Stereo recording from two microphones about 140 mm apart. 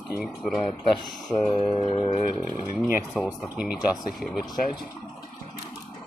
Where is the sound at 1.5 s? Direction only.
40° left (ahead or behind).